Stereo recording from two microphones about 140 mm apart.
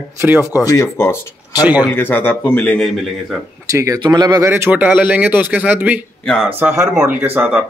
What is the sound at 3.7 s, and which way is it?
Speech, 25° right (ahead or behind).